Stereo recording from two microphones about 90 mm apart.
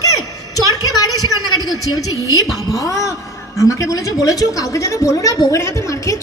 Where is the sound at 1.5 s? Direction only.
45° left (ahead or behind).